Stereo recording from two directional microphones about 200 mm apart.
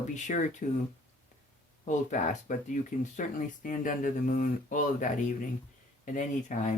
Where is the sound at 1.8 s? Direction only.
40° left (ahead or behind).